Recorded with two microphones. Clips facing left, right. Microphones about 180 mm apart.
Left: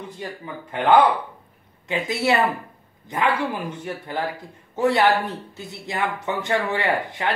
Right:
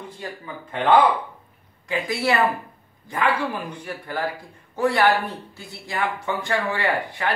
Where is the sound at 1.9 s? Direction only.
25° left (ahead or behind).